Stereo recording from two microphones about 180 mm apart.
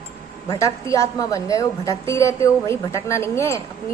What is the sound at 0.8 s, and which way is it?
A woman's voice, 15° left (ahead or behind).